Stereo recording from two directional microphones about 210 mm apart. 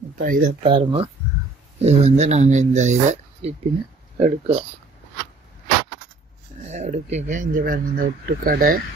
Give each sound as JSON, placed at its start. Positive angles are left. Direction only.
{"t": 0.1, "sound": "speech", "side_deg": -40}
{"t": 0.6, "sound": "speech", "side_deg": -25}
{"t": 6.7, "sound": "speech", "side_deg": -35}